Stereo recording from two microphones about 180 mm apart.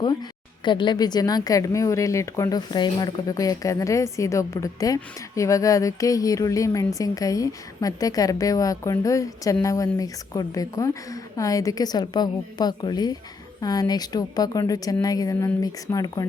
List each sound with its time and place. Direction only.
0.0 s a woman's voice: 25° left (ahead or behind)